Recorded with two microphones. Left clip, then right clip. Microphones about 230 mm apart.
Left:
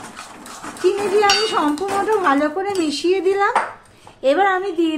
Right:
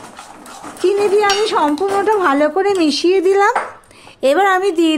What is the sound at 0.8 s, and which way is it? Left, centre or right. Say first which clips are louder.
A woman's voice: right 3 dB; right.